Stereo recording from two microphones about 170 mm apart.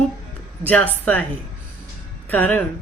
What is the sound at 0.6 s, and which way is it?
Speech, 10° left (ahead or behind).